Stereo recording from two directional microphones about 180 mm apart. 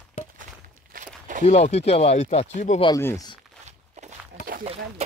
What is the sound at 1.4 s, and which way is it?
Speech, 35° left (ahead or behind).